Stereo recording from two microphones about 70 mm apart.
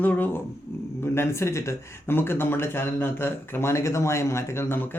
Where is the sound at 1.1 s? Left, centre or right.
Left.